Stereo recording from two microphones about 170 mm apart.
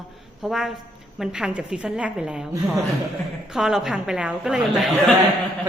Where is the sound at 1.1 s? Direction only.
5° right (ahead or behind).